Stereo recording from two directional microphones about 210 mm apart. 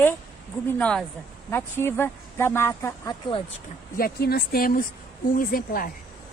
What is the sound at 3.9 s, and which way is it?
A woman's voice, 45° left (ahead or behind).